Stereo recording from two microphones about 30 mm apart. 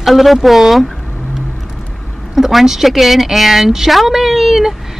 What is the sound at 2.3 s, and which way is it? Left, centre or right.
Speech, centre.